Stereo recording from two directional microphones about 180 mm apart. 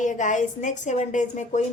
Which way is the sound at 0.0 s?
45° left (ahead or behind).